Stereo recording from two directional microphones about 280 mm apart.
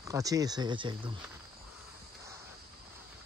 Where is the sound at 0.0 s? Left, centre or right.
Centre.